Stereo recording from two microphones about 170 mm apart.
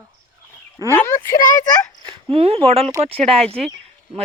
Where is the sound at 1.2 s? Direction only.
55° left (ahead or behind).